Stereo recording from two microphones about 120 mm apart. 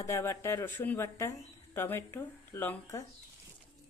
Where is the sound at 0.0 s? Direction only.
25° left (ahead or behind).